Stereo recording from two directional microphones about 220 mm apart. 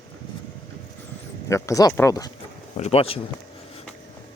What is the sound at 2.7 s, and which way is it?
Speech, 30° left (ahead or behind).